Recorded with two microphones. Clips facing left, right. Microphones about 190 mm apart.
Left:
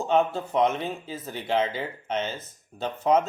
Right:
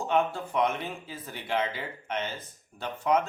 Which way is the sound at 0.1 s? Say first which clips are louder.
Left 4 dB; 25° left (ahead or behind).